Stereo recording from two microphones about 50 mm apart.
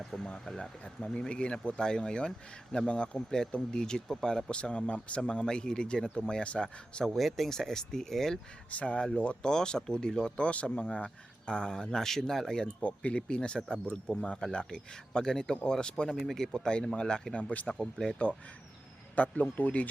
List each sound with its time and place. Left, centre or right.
0.0 s speech: centre
7.1 s speech: centre
8.7 s speech: left; by 12.6 s centre
12.8 s speech: left
17.7 s speech: centre
19.1 s speech: left